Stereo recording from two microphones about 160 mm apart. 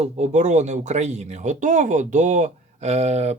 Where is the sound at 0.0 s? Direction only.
45° right (ahead or behind).